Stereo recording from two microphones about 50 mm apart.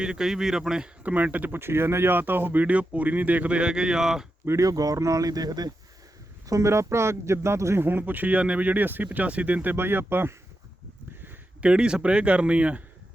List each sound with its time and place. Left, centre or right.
0.0 s speech: centre
1.0 s speech: right
1.5 s speech: right
2.6 s speech: right; by 4.3 s centre
4.4 s speech: right
6.6 s speech: right
7.9 s speech: right
9.1 s speech: right
9.7 s speech: right
11.6 s speech: centre